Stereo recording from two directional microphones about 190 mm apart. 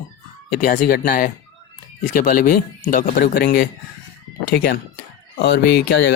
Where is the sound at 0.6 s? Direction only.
45° left (ahead or behind).